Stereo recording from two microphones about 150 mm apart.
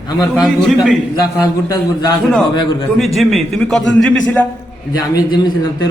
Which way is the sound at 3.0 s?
Centre (ahead or behind).